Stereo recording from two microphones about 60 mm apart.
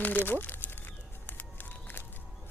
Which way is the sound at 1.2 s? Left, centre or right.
Left.